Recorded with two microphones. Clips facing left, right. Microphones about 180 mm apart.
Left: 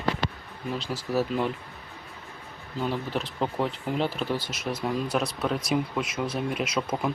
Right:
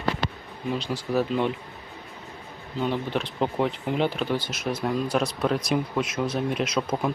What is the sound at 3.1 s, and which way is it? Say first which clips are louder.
Speech: right 3 dB; 5° left (ahead or behind).